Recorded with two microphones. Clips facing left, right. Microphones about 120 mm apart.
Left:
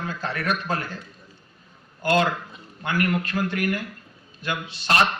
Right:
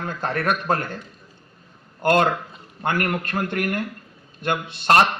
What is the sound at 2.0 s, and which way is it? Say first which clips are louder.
A man's voice: right 3 dB; 50° right (ahead or behind).